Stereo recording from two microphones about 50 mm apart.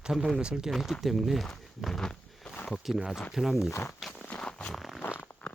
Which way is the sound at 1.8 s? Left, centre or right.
Centre.